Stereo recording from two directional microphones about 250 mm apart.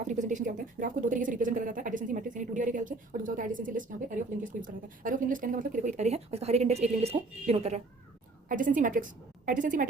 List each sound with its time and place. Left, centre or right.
0.0 s a woman's voice: right